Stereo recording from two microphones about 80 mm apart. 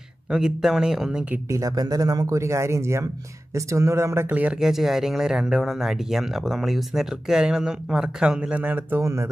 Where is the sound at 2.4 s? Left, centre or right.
Right.